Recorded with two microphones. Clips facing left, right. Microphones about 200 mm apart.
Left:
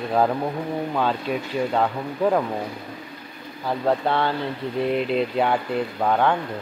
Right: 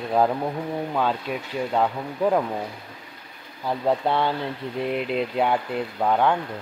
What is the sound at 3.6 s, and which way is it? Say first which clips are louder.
Speech: left 1 dB; 10° right (ahead or behind).